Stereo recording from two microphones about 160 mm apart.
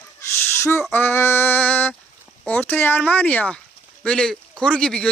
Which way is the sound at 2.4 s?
10° left (ahead or behind).